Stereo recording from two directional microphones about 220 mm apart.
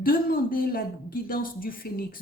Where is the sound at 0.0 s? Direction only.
40° left (ahead or behind).